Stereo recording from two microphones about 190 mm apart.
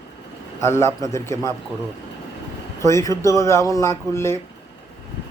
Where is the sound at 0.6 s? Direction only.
15° left (ahead or behind).